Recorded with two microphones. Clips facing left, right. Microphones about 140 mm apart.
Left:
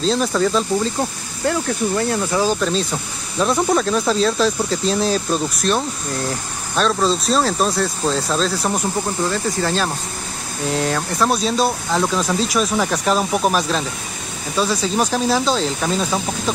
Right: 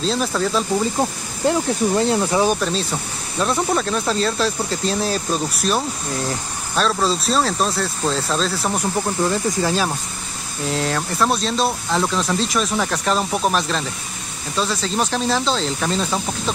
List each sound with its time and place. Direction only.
0.0 s speech: centre (ahead or behind)
1.5 s speech: 25° right (ahead or behind)
2.6 s speech: centre (ahead or behind)